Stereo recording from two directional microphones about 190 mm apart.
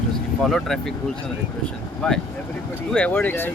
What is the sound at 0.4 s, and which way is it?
Speech, centre (ahead or behind).